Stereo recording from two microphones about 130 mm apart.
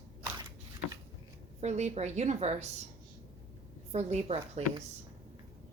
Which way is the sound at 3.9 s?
55° right (ahead or behind).